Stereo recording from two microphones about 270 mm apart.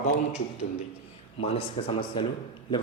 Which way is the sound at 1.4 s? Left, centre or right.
Left.